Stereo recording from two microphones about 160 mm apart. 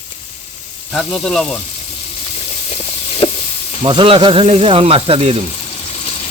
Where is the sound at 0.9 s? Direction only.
5° left (ahead or behind).